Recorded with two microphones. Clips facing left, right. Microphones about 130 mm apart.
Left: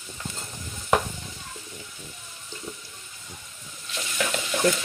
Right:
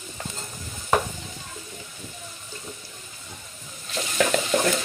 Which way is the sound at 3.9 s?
40° right (ahead or behind).